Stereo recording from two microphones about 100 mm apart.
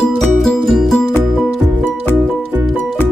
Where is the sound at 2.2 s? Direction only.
20° right (ahead or behind).